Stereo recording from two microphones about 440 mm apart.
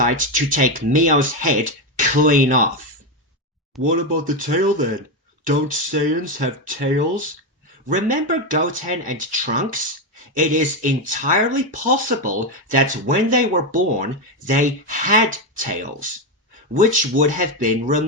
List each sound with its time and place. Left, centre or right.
0.0 s speech: centre
3.9 s speech: centre
7.9 s speech: centre